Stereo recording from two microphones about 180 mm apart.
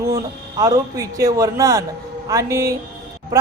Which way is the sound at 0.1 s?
20° right (ahead or behind).